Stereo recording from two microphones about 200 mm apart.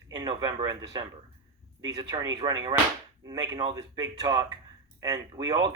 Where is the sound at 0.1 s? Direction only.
20° right (ahead or behind).